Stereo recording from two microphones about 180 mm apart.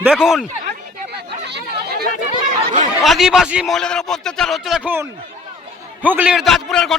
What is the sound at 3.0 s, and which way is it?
Speech, centre (ahead or behind).